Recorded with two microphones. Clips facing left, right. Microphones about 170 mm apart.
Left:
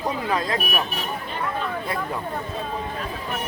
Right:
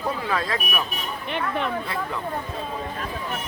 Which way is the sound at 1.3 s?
70° right (ahead or behind).